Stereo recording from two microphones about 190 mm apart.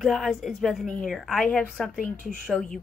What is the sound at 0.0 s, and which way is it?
Speech, centre (ahead or behind).